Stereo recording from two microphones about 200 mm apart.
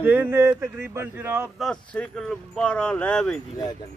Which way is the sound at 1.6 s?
5° left (ahead or behind).